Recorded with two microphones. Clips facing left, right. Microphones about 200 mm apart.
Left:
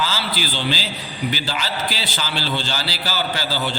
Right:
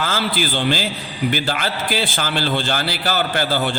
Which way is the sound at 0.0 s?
50° right (ahead or behind).